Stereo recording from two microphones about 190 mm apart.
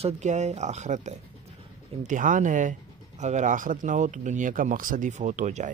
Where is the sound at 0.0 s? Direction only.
40° right (ahead or behind).